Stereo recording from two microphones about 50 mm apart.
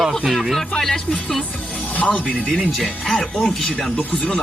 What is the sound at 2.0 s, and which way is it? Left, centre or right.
Speech, left.